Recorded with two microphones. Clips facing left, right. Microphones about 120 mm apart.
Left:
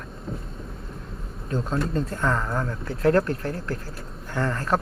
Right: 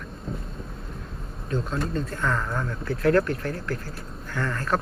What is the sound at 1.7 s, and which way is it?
Speech, 30° left (ahead or behind).